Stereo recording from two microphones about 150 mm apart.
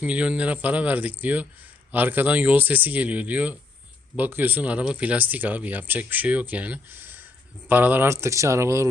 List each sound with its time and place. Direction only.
0.0 s speech: 10° right (ahead or behind)